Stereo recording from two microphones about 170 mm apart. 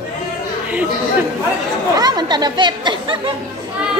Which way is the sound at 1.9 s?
25° right (ahead or behind).